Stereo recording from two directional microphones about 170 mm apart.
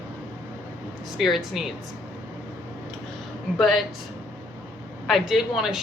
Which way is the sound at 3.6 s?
Centre (ahead or behind).